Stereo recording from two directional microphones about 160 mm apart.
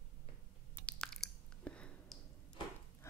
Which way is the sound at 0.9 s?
5° left (ahead or behind).